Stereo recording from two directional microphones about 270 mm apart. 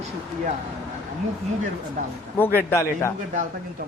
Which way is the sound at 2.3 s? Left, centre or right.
Centre.